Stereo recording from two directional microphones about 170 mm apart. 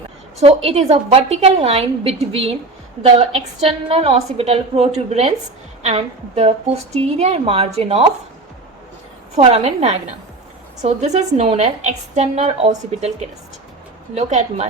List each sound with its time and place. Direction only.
0.3 s a woman's voice: 40° right (ahead or behind)
9.3 s a woman's voice: 40° right (ahead or behind)